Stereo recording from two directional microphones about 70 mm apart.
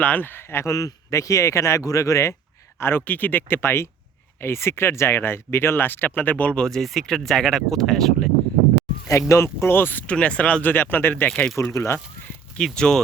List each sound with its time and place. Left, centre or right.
0.0 s speech: left
0.7 s speech: left
2.7 s speech: left; by 8.3 s centre
9.3 s speech: left
10.1 s speech: centre
11.3 s speech: centre
11.7 s speech: left
12.5 s speech: centre